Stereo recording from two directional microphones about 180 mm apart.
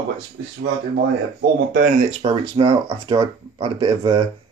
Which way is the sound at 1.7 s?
45° right (ahead or behind).